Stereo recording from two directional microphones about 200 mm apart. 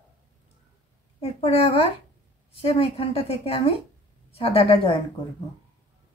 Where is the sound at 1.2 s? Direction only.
30° left (ahead or behind).